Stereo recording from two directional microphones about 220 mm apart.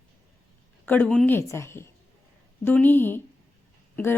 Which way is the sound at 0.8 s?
5° left (ahead or behind).